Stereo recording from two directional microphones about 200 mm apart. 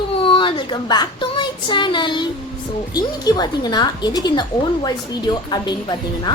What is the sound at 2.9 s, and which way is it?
A woman's voice, 20° left (ahead or behind).